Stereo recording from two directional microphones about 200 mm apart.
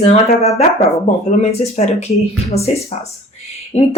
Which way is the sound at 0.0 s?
30° left (ahead or behind).